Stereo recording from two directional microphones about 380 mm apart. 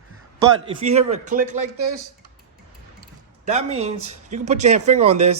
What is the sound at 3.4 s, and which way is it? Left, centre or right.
Speech, centre.